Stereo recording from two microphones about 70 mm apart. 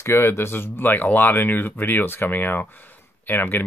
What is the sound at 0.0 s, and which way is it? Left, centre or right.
Speech, left.